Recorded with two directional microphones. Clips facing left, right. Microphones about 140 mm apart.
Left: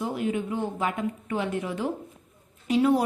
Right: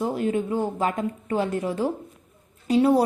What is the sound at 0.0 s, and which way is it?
Speech, 40° right (ahead or behind).